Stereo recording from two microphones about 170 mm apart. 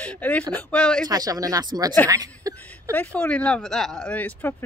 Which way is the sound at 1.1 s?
20° right (ahead or behind).